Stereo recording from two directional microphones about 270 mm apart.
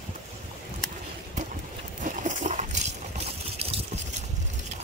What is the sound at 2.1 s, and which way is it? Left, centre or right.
Coin, right.